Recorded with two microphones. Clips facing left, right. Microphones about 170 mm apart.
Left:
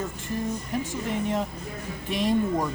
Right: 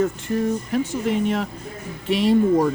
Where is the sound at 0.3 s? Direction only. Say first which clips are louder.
Right 7 dB; 75° right (ahead or behind).